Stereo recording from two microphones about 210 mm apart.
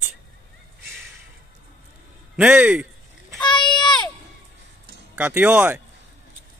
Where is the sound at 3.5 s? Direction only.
20° left (ahead or behind).